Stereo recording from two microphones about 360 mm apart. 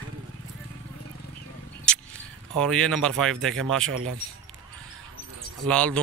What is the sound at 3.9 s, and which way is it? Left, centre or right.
Speech, right.